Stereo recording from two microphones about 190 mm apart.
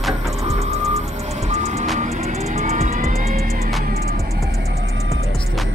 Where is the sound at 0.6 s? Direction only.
35° right (ahead or behind).